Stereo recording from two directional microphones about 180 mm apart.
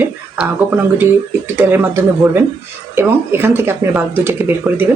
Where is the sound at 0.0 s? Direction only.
10° right (ahead or behind).